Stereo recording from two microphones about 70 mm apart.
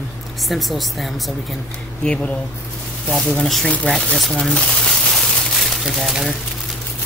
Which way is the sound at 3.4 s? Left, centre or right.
Centre.